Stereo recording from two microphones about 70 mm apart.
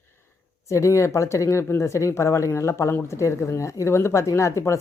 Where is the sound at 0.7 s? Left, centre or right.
Left.